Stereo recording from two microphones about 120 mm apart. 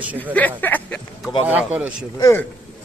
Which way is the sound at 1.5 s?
10° right (ahead or behind).